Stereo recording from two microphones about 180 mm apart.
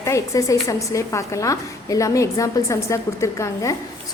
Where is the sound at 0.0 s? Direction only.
15° left (ahead or behind).